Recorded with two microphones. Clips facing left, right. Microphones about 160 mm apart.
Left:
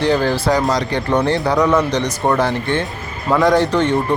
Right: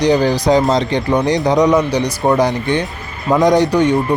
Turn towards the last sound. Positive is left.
turn(degrees=-10)  # may be behind; listen again after turning